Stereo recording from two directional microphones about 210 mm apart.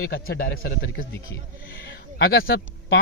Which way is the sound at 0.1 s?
45° left (ahead or behind).